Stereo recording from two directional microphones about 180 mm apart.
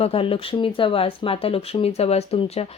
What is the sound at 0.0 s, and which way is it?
Speech, 30° left (ahead or behind).